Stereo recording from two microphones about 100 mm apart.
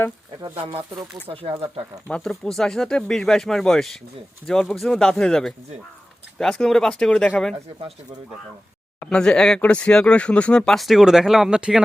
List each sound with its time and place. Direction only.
1.3 s speech: 70° right (ahead or behind)
2.0 s speech: 10° left (ahead or behind)
9.0 s speech: 10° left (ahead or behind); by 11.8 s 5° right (ahead or behind)